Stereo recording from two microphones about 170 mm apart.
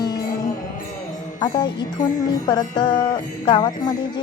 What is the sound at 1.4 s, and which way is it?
Music, 25° left (ahead or behind).